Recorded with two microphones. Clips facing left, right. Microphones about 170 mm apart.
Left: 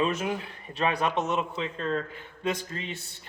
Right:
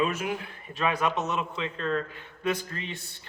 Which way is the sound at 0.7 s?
30° left (ahead or behind).